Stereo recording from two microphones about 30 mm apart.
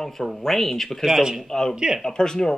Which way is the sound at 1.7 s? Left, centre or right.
Right.